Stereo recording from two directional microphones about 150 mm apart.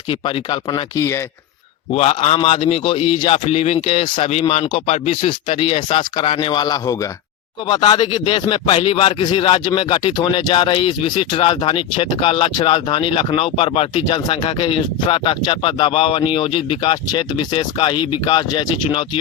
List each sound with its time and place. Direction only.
0.1 s speech: 35° left (ahead or behind)
0.7 s speech: 20° left (ahead or behind)
1.9 s speech: 45° left (ahead or behind)